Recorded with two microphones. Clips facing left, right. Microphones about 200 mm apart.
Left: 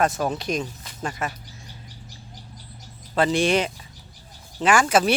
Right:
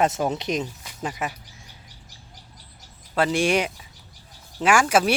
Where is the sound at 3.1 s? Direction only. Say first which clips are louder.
Left 1 dB; 10° right (ahead or behind).